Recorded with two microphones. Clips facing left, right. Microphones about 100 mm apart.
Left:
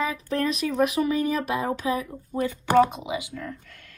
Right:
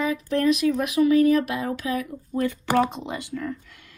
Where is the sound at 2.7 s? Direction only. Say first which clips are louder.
Left 5 dB; centre (ahead or behind).